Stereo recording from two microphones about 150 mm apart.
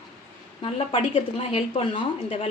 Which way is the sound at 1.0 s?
45° left (ahead or behind).